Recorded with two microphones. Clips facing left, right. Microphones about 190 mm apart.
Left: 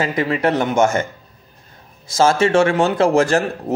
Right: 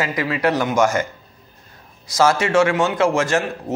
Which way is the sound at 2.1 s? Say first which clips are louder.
Left 2 dB; 30° left (ahead or behind).